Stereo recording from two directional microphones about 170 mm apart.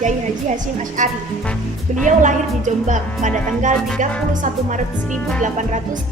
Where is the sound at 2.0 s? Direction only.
45° right (ahead or behind).